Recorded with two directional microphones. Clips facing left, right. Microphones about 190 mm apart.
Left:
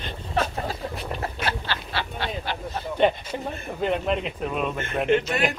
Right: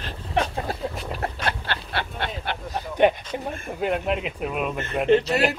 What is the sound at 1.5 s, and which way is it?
Duck, 55° right (ahead or behind).